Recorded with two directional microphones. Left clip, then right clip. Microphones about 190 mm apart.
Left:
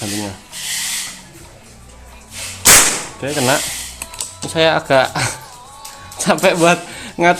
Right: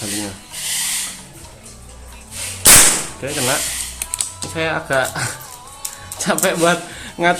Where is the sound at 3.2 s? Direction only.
35° left (ahead or behind).